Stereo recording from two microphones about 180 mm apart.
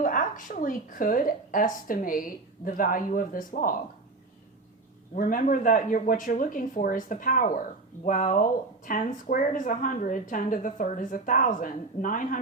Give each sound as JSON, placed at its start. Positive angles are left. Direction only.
{"t": 0.0, "sound": "a woman's voice", "side_deg": 50}
{"t": 5.1, "sound": "a woman's voice", "side_deg": 45}